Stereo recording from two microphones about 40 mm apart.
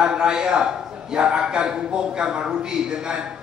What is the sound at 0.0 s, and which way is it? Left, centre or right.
A man's voice, centre.